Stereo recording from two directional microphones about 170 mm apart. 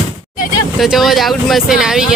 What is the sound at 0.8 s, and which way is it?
Speech, centre (ahead or behind).